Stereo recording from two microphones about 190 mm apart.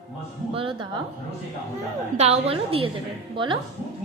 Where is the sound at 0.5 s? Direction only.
30° right (ahead or behind).